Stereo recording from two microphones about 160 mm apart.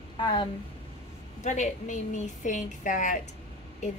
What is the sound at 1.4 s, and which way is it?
A woman's voice, 50° left (ahead or behind).